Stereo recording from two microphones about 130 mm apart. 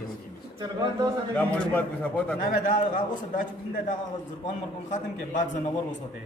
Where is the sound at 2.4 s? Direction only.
80° left.